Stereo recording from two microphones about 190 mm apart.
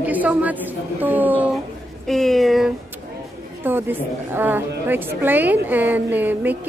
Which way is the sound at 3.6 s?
10° right (ahead or behind).